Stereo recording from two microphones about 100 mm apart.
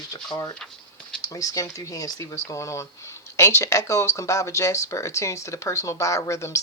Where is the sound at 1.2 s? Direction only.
35° left (ahead or behind).